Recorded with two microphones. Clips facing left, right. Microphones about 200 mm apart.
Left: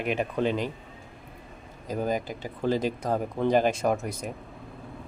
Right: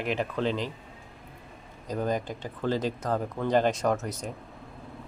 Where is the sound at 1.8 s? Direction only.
10° left (ahead or behind).